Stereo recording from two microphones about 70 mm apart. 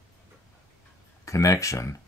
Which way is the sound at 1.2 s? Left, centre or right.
Left.